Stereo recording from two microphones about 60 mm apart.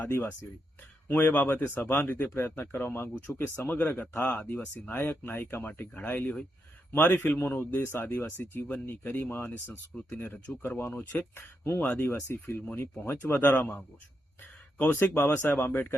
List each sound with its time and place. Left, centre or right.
1.1 s speech: left
7.8 s speech: left
9.9 s speech: left
10.8 s speech: left
11.3 s speech: left
11.8 s speech: left
14.8 s speech: left